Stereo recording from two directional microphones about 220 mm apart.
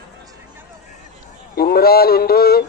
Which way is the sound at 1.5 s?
45° left (ahead or behind).